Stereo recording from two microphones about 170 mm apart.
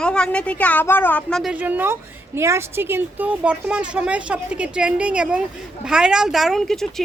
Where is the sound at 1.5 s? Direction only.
10° right (ahead or behind).